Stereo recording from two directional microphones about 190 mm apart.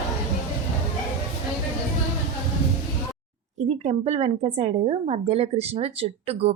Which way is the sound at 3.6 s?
35° right (ahead or behind).